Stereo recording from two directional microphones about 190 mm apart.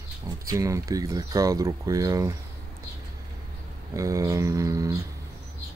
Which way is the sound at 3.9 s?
15° right (ahead or behind).